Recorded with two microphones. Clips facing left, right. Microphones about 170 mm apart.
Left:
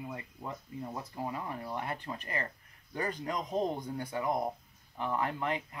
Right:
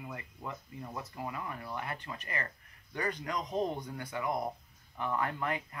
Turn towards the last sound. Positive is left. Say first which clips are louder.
# left 1 dB
turn(degrees=20)  # may be behind; listen again after turning